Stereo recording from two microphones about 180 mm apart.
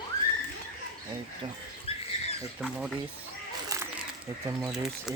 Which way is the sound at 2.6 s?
Centre (ahead or behind).